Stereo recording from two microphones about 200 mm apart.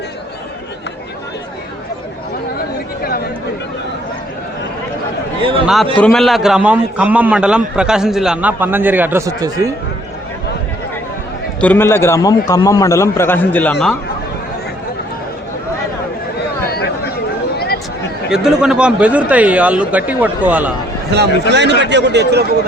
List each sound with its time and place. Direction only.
2.6 s chatter: 50° left (ahead or behind)
5.4 s a sound: 25° right (ahead or behind)
5.6 s a man's voice: centre (ahead or behind); by 9.7 s 15° right (ahead or behind)
11.6 s a man's voice: 10° left (ahead or behind)
18.3 s a man's voice: 5° right (ahead or behind)
21.5 s a man's voice: 60° right (ahead or behind)